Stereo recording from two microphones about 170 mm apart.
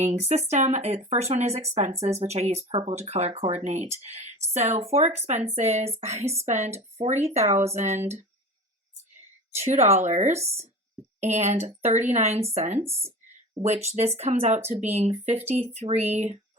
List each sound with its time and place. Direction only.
0.0 s speech: 40° right (ahead or behind)
9.6 s speech: 40° right (ahead or behind)
10.3 s speech: 15° right (ahead or behind)
11.2 s speech: 40° right (ahead or behind)
12.9 s speech: 15° right (ahead or behind)
13.8 s speech: 40° right (ahead or behind)